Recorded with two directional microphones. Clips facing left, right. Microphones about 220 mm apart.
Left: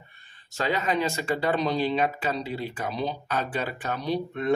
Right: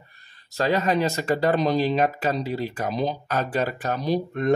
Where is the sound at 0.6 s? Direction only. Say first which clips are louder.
Right 4 dB; 40° right (ahead or behind).